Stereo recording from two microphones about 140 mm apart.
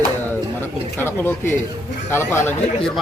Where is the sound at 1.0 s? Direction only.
15° left (ahead or behind).